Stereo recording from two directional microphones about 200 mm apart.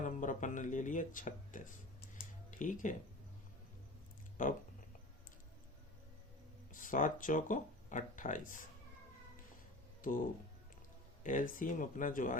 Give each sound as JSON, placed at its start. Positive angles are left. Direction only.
{"t": 0.0, "sound": "speech", "side_deg": 40}
{"t": 4.4, "sound": "speech", "side_deg": 40}
{"t": 6.7, "sound": "speech", "side_deg": 40}
{"t": 10.0, "sound": "speech", "side_deg": 45}